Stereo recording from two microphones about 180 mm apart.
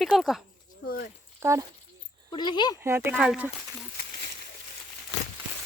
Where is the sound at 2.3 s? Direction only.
25° left (ahead or behind).